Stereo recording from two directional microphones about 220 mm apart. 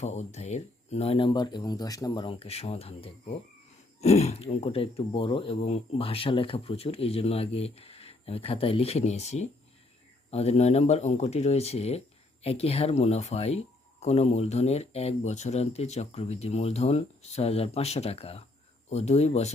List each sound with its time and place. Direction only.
0.0 s speech: 30° left (ahead or behind)